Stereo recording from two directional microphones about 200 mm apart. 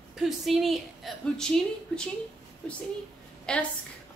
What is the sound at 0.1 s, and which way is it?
A woman's voice, centre (ahead or behind).